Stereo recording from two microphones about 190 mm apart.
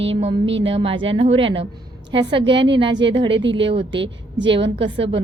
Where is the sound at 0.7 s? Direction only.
30° right (ahead or behind).